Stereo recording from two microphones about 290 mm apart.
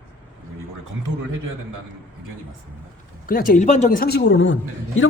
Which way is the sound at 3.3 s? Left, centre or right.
Left.